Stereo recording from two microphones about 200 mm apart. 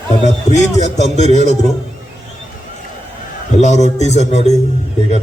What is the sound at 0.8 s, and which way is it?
Speech, 35° left (ahead or behind).